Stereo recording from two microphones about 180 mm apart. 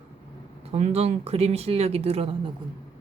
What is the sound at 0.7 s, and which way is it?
Speech, 35° right (ahead or behind).